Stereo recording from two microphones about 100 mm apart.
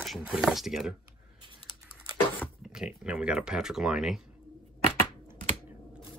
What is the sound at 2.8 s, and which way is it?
Speech, 10° right (ahead or behind).